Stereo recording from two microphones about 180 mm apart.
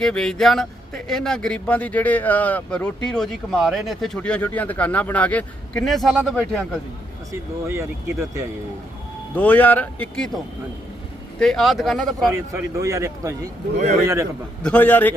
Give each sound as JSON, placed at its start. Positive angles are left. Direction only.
{"t": 0.0, "sound": "speech", "side_deg": 5}
{"t": 7.7, "sound": "a man's voice", "side_deg": -15}
{"t": 9.3, "sound": "speech", "side_deg": 10}
{"t": 11.3, "sound": "speech", "side_deg": 5}
{"t": 12.3, "sound": "a man's voice", "side_deg": -15}
{"t": 13.7, "sound": "speech", "side_deg": -40}
{"t": 14.0, "sound": "a man's voice", "side_deg": -15}
{"t": 14.6, "sound": "speech", "side_deg": 10}